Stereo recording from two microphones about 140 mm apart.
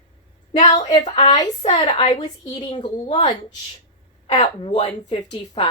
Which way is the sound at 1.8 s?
35° left (ahead or behind).